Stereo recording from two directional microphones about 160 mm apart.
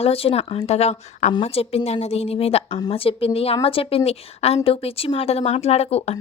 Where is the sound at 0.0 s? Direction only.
35° left (ahead or behind).